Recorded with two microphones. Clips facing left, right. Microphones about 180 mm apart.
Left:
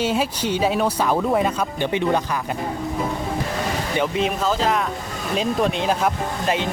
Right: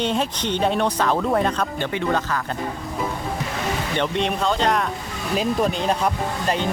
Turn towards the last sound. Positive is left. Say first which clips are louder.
# left 1 dB
turn(degrees=0)  # may be behind; listen again after turning